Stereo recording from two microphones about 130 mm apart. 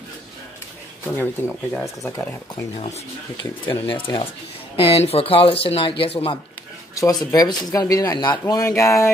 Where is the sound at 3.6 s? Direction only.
40° left (ahead or behind).